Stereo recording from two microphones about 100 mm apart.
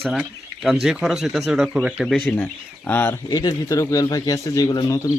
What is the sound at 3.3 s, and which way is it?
Speech, 40° left (ahead or behind).